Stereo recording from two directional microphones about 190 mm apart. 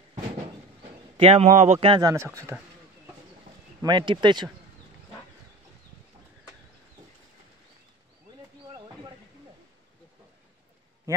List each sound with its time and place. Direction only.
1.1 s a man's voice: 30° right (ahead or behind)
2.0 s speech: 15° right (ahead or behind)
3.8 s speech: 25° right (ahead or behind)
8.7 s a sound: 20° right (ahead or behind)